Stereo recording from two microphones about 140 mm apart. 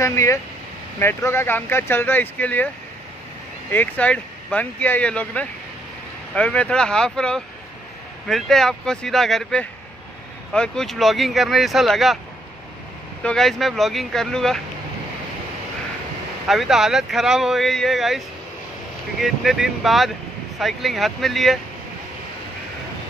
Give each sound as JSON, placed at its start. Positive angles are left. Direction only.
{"t": 0.0, "sound": "speech", "side_deg": 20}
{"t": 3.7, "sound": "speech", "side_deg": 10}
{"t": 13.2, "sound": "speech", "side_deg": 5}
{"t": 16.4, "sound": "speech", "side_deg": 0}
{"t": 19.2, "sound": "speech", "side_deg": 0}